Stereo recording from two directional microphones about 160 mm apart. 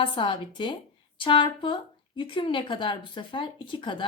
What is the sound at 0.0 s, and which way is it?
A woman's voice, 30° left (ahead or behind).